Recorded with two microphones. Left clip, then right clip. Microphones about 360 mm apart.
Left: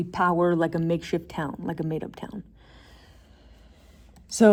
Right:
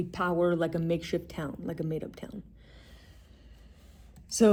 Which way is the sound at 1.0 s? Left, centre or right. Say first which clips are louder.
Left 4 dB; centre.